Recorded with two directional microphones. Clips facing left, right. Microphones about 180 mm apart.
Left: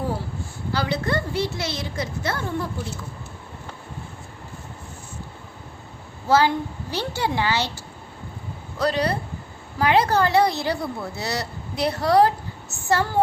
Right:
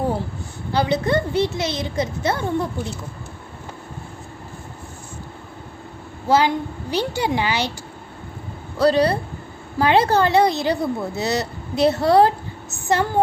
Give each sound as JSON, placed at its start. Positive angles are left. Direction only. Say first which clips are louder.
{"t": 0.7, "sound": "a woman's voice", "louder": "right 5 dB", "side_deg": -20}
{"t": 6.2, "sound": "a woman's voice", "louder": "right 1 dB", "side_deg": -15}
{"t": 8.8, "sound": "a woman's voice", "louder": "right 6 dB", "side_deg": -30}